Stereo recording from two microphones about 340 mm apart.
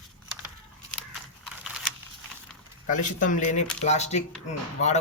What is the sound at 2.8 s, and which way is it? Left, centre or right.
Speech, left.